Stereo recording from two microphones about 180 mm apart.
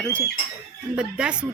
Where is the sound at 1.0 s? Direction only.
5° right (ahead or behind).